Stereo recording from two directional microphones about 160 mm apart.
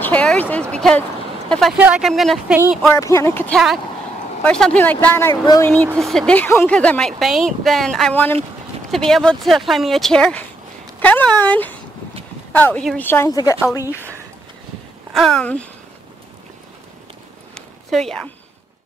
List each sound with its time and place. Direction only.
0.0 s speech: 5° left (ahead or behind)
1.8 s speech: 5° right (ahead or behind)
2.9 s speech: 20° left (ahead or behind)
3.5 s speech: centre (ahead or behind); by 13.7 s 20° left (ahead or behind)
15.1 s speech: 5° left (ahead or behind)
17.6 s a sound: centre (ahead or behind)